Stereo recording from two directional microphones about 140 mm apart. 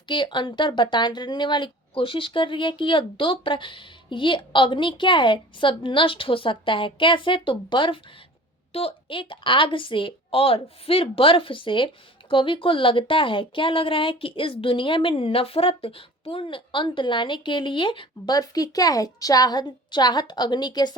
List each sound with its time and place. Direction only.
0.1 s a woman's voice: 35° left (ahead or behind)